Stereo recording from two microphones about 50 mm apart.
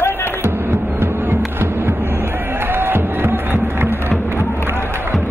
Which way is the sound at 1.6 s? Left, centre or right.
Right.